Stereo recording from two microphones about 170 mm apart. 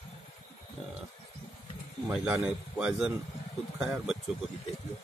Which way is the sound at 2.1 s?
5° right (ahead or behind).